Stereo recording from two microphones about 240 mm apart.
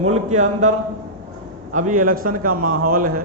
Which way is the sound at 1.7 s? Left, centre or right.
Right.